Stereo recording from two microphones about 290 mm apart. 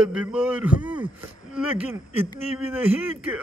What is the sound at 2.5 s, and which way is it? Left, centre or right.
Speech, centre.